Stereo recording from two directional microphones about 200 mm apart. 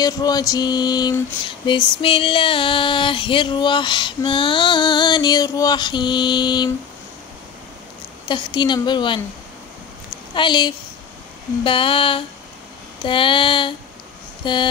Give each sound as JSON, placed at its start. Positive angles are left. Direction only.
{"t": 0.0, "sound": "female singing", "side_deg": 20}
{"t": 8.3, "sound": "female singing", "side_deg": 25}
{"t": 10.3, "sound": "female singing", "side_deg": 25}
{"t": 14.4, "sound": "speech", "side_deg": 25}